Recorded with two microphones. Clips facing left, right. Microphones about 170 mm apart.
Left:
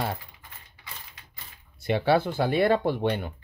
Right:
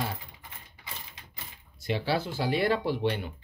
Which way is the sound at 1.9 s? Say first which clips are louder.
Left 6 dB; 55° left (ahead or behind).